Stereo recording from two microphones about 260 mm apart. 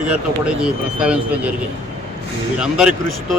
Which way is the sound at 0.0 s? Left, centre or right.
Centre.